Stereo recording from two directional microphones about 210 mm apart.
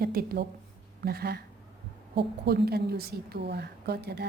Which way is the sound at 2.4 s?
50° right (ahead or behind).